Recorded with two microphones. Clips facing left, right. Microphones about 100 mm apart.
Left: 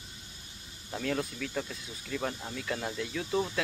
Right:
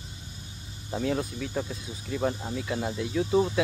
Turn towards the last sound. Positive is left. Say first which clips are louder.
# right 7 dB
turn(degrees=-15)  # may be behind; listen again after turning